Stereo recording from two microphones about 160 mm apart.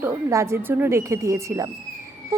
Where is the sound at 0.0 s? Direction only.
20° right (ahead or behind).